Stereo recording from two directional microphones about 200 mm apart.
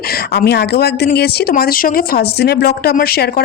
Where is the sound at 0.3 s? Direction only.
55° left (ahead or behind).